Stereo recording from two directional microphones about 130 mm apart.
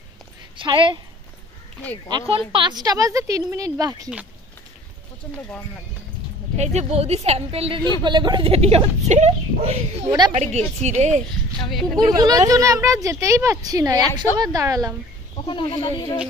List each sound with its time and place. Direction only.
0.6 s speech: 40° right (ahead or behind)
2.0 s speech: 40° right (ahead or behind)
6.5 s speech: 60° right (ahead or behind)
8.0 s speech: 35° right (ahead or behind); by 11.2 s 65° right (ahead or behind)
12.0 s speech: 30° right (ahead or behind)
15.4 s speech: 45° left (ahead or behind)